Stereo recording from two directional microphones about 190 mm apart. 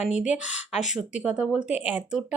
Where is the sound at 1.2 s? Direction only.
5° right (ahead or behind).